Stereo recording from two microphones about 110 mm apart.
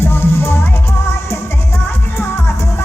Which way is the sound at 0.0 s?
20° left (ahead or behind).